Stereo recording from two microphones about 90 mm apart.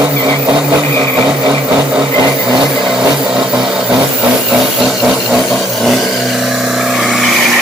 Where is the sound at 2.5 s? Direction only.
5° right (ahead or behind).